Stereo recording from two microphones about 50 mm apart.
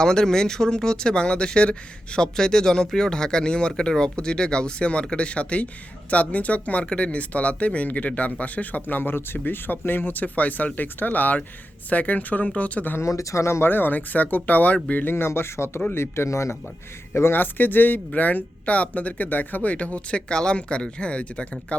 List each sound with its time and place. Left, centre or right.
0.0 s speech: centre
13.0 s speech: left
13.6 s speech: left
15.0 s speech: left
17.3 s speech: left